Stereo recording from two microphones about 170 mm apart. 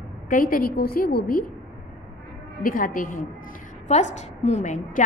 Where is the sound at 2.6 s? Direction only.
55° left (ahead or behind).